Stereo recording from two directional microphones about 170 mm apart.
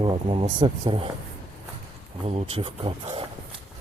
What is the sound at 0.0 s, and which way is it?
Speech, 30° right (ahead or behind).